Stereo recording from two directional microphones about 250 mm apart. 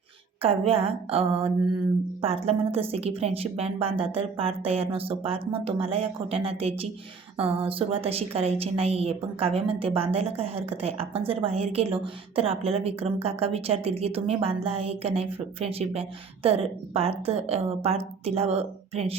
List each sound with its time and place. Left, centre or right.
0.4 s a woman's voice: right